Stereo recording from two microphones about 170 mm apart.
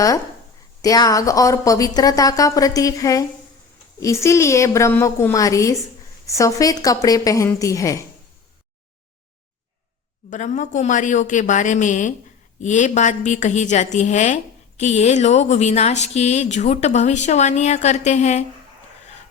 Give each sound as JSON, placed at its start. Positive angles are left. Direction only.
{"t": 0.8, "sound": "a woman's voice", "side_deg": 20}
{"t": 10.2, "sound": "a woman's voice", "side_deg": 45}